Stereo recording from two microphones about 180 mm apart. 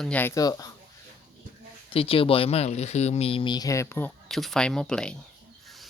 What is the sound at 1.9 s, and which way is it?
Speech, 30° left (ahead or behind).